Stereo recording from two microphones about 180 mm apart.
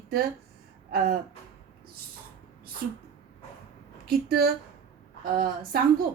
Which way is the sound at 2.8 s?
55° right (ahead or behind).